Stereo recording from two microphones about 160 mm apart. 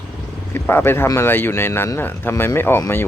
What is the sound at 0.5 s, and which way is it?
Speech, 15° left (ahead or behind).